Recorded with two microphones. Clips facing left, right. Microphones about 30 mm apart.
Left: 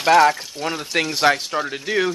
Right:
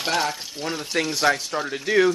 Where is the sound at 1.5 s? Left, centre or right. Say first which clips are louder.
Left 1 dB; centre.